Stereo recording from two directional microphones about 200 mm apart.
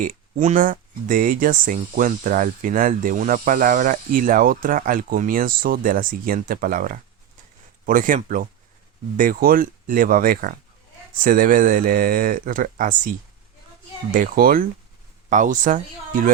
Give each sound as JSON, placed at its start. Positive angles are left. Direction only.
{"t": 0.0, "sound": "speech", "side_deg": -40}